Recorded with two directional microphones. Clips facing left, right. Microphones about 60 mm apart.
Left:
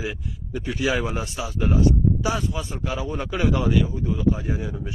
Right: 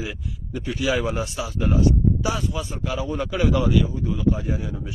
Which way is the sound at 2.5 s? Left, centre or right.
Centre.